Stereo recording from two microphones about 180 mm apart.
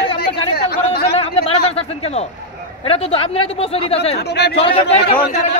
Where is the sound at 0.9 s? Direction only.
35° left (ahead or behind).